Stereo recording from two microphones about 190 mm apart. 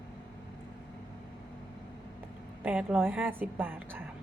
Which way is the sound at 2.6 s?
10° right (ahead or behind).